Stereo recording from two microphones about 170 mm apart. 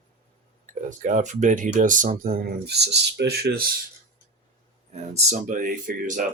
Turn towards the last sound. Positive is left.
turn(degrees=-50)  # may be behind; listen again after turning